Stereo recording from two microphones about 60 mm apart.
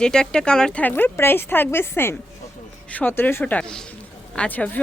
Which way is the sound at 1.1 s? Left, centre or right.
Left.